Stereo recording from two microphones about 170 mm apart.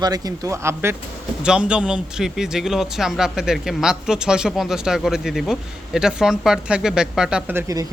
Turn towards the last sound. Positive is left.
turn(degrees=-15)  # may be behind; listen again after turning